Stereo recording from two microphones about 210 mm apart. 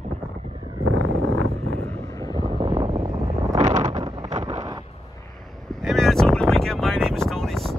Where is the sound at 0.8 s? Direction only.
75° right (ahead or behind).